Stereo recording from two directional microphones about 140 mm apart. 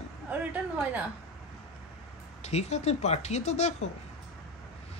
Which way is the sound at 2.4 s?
50° left (ahead or behind).